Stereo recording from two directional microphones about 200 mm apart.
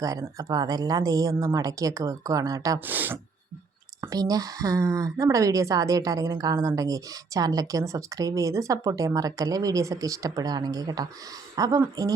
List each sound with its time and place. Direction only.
0.0 s a woman's voice: 15° right (ahead or behind)